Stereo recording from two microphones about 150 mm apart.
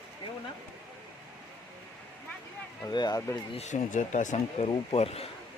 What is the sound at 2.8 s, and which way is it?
Speech, 25° left (ahead or behind).